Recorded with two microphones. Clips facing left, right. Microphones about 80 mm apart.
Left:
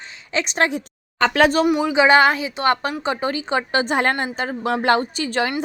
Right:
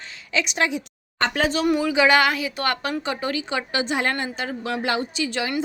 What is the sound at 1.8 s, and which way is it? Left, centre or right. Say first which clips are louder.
A woman's voice: left 4 dB; left.